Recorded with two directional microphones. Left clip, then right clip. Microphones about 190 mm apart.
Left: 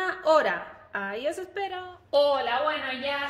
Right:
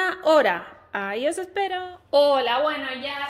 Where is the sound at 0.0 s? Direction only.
45° right (ahead or behind).